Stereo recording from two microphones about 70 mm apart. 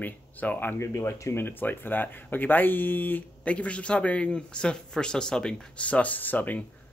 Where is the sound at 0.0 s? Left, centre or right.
Left.